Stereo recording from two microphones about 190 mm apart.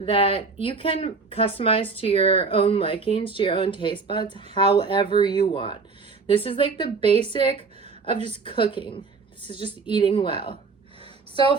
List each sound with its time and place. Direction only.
0.0 s a woman's voice: 30° left (ahead or behind)